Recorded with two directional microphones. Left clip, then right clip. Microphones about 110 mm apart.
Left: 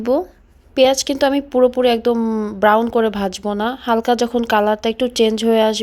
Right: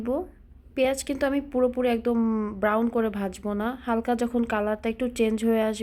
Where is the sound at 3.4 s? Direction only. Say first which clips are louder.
Left 8 dB; 35° left (ahead or behind).